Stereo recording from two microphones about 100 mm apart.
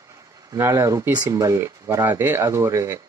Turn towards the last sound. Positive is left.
turn(degrees=-30)  # may be behind; listen again after turning